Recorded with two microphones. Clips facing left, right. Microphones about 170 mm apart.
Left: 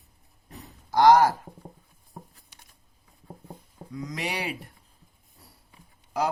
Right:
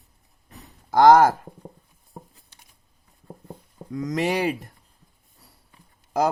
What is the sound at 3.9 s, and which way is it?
Speech, 50° right (ahead or behind).